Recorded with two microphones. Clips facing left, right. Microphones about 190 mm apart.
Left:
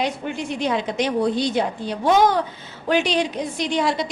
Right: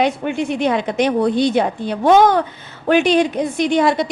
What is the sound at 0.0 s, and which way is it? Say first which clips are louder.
A woman's voice: right 7 dB; 60° right (ahead or behind).